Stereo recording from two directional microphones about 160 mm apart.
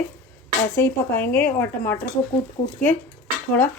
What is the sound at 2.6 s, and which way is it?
Speech, 35° left (ahead or behind).